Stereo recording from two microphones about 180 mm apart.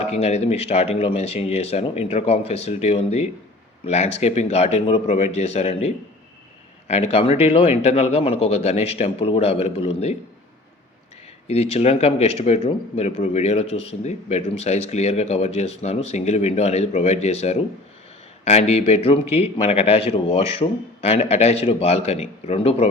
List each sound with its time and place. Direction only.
0.0 s speech: 35° left (ahead or behind)
11.4 s speech: 35° left (ahead or behind)